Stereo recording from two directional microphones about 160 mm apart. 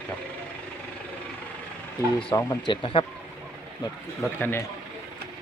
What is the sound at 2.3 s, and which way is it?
Speech, 20° left (ahead or behind).